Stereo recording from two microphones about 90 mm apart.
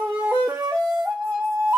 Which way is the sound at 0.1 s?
15° right (ahead or behind).